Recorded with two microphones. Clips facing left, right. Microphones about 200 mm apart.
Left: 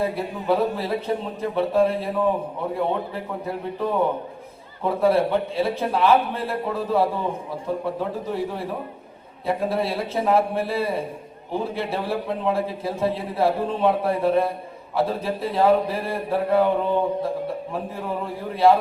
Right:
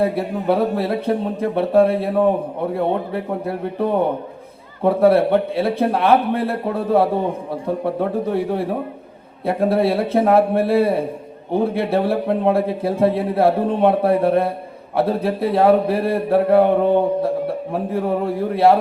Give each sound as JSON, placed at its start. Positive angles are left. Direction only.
{"t": 0.0, "sound": "speech", "side_deg": -60}